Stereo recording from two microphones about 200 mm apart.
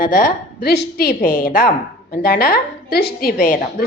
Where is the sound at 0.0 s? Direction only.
45° left (ahead or behind).